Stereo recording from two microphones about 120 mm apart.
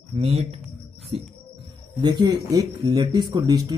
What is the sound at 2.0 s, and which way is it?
Speech, 35° right (ahead or behind).